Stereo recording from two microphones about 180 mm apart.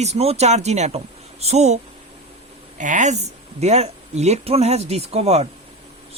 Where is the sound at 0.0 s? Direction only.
35° right (ahead or behind).